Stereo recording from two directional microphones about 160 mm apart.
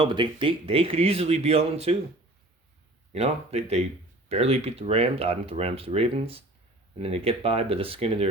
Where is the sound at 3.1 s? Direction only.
40° right (ahead or behind).